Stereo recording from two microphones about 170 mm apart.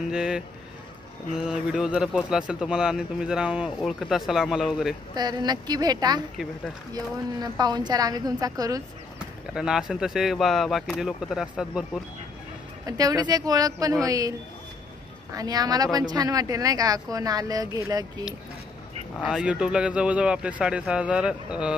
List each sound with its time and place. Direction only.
0.1 s a man's voice: 5° right (ahead or behind)
5.1 s speech: 25° right (ahead or behind)
9.5 s a man's voice: 5° right (ahead or behind)
12.8 s speech: 20° right (ahead or behind)
15.3 s speech: 20° right (ahead or behind)
19.2 s speech: 5° right (ahead or behind)